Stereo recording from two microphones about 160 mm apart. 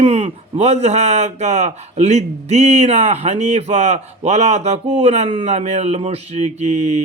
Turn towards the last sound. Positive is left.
turn(degrees=-45)  # may be behind; listen again after turning